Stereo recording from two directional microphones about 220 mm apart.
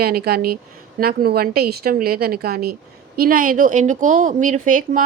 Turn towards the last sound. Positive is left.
turn(degrees=-35)  # may be behind; listen again after turning